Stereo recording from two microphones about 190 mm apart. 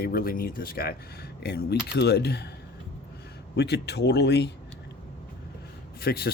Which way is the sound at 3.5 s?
60° left (ahead or behind).